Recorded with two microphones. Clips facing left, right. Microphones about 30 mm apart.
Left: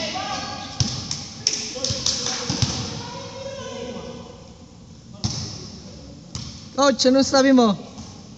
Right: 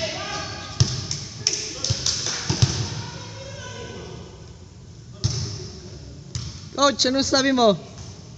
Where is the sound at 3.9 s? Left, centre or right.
Left.